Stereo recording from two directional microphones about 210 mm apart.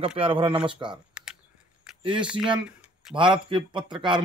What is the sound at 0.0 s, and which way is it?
Speech, 25° right (ahead or behind).